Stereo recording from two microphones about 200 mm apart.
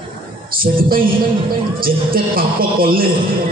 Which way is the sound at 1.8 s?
45° right (ahead or behind).